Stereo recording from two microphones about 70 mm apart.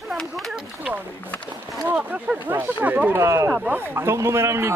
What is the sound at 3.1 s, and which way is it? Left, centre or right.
Speech, right.